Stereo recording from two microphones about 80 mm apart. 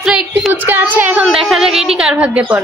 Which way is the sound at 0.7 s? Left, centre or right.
Right.